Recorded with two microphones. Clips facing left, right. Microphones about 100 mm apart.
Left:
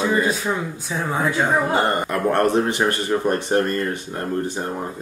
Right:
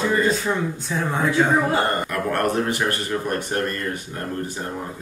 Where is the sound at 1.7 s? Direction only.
20° left (ahead or behind).